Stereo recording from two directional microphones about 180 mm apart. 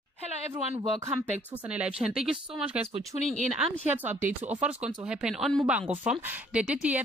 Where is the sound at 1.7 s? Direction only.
5° right (ahead or behind).